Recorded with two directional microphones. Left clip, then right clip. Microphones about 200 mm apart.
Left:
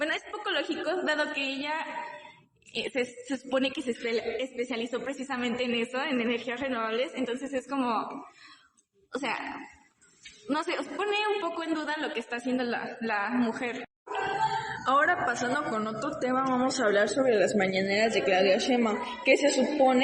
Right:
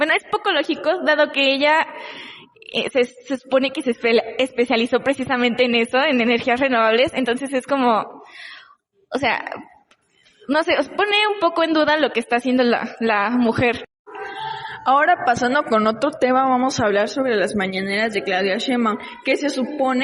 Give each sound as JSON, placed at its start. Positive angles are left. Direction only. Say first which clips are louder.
{"t": 0.0, "sound": "a woman's voice", "louder": "right 13 dB", "side_deg": -45}
{"t": 2.7, "sound": "a woman's voice", "louder": "right 12 dB", "side_deg": -40}
{"t": 9.1, "sound": "a woman's voice", "louder": "right 12 dB", "side_deg": -45}
{"t": 10.5, "sound": "a woman's voice", "louder": "right 12 dB", "side_deg": -45}
{"t": 14.8, "sound": "a woman's voice", "louder": "right 10 dB", "side_deg": -35}